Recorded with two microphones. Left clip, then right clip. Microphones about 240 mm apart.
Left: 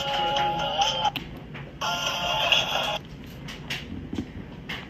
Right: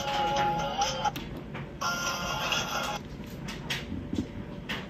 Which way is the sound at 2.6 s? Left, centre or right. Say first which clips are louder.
Left 5 dB; right.